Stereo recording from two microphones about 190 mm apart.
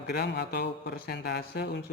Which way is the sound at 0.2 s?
60° left (ahead or behind).